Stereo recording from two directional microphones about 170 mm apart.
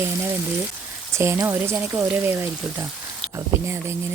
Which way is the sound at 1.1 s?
15° right (ahead or behind).